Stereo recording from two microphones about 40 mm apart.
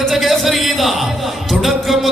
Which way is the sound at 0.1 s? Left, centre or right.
Centre.